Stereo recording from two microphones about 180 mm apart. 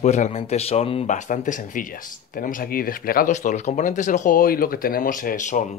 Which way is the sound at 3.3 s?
40° left (ahead or behind).